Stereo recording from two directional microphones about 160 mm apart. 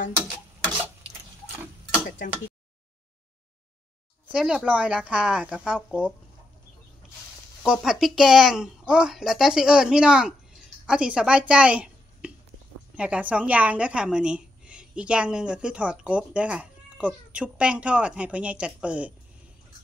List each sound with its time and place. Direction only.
2.0 s a sound: 55° left (ahead or behind)
4.3 s a woman's voice: 5° right (ahead or behind)
7.6 s a woman's voice: 5° right (ahead or behind)